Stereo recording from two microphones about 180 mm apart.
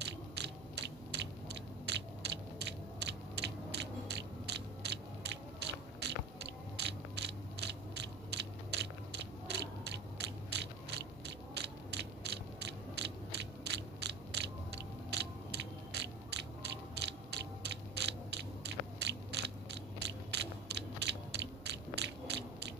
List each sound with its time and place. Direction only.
0.0 s mechanisms: 70° right (ahead or behind)